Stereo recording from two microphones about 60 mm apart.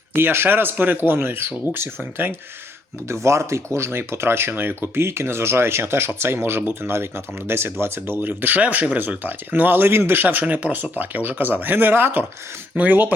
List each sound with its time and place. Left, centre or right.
0.1 s speech: right
3.1 s speech: right